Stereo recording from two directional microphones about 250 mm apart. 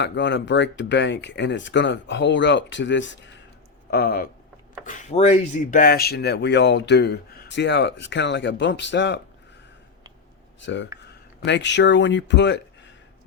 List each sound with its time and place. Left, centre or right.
0.0 s speech: left
10.6 s speech: left